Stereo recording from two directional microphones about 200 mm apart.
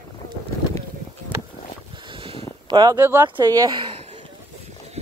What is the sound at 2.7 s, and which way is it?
Speech, 20° right (ahead or behind).